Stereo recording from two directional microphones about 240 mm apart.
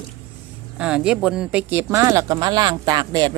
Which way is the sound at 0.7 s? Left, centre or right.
Centre.